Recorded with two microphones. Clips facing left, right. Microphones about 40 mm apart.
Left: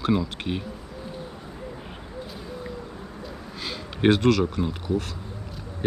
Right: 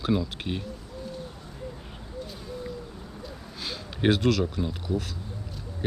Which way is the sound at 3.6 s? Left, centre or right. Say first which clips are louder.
Left 4 dB; centre.